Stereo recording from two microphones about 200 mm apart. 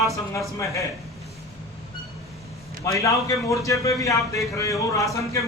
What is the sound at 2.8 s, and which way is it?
A man's voice, 15° left (ahead or behind).